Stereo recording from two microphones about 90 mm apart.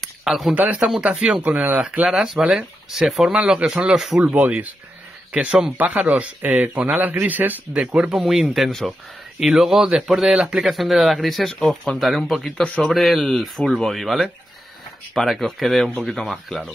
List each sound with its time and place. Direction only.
0.0 s a sound: centre (ahead or behind)
0.7 s speech: 10° right (ahead or behind)
4.2 s speech: 15° right (ahead or behind)
7.8 s a man's voice: 10° right (ahead or behind)